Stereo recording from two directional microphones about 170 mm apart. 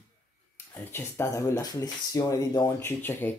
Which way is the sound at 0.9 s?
15° left (ahead or behind).